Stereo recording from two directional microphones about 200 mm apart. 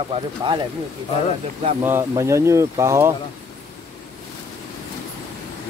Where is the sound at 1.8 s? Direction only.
15° right (ahead or behind).